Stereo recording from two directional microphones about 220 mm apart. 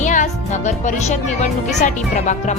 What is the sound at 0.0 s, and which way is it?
A woman's voice, 35° left (ahead or behind).